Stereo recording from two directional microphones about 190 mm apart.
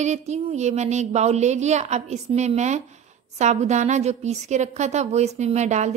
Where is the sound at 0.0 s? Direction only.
35° right (ahead or behind).